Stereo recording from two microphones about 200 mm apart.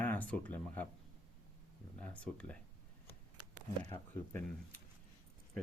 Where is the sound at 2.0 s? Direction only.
5° left (ahead or behind).